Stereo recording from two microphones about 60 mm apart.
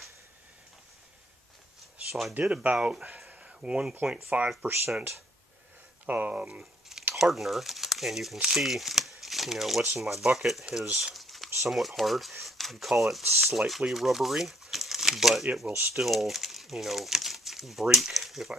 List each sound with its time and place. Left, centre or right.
2.5 s speech: right
3.3 s a sound: centre
3.9 s speech: right
4.6 s speech: right
6.0 s speech: right
6.6 s a sound: centre
7.2 s speech: centre